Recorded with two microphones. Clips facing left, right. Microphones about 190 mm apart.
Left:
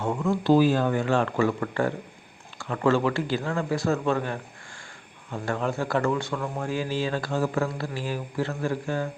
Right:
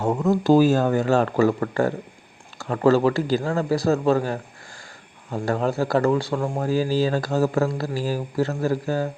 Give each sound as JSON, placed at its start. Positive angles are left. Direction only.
{"t": 0.0, "sound": "speech", "side_deg": -40}